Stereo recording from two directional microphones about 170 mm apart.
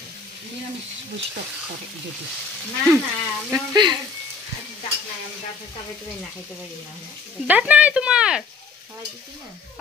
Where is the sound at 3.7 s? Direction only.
25° right (ahead or behind).